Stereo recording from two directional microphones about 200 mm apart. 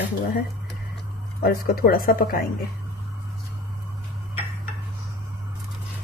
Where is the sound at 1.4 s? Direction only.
50° left (ahead or behind).